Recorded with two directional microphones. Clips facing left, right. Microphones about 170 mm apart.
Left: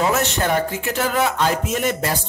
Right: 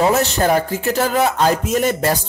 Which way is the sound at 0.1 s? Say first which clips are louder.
Right 4 dB; 35° right (ahead or behind).